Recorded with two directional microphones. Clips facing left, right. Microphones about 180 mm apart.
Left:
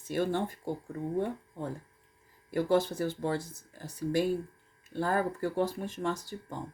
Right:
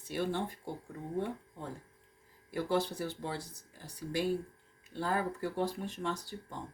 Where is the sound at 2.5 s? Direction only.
50° left (ahead or behind).